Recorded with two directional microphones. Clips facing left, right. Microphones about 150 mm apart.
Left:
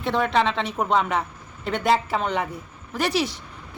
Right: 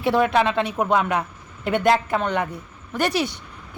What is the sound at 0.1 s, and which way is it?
Speech, 5° right (ahead or behind).